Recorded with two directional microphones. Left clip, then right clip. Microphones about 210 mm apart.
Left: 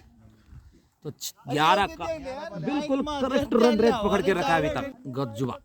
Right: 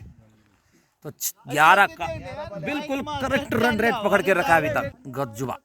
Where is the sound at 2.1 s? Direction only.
40° left (ahead or behind).